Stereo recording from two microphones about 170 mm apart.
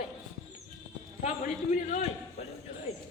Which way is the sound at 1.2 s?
45° left (ahead or behind).